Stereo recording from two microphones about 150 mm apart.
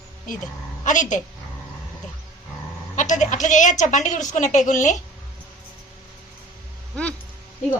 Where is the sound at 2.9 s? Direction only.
55° left (ahead or behind).